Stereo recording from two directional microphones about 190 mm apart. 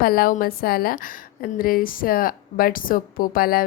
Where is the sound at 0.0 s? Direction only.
50° left (ahead or behind).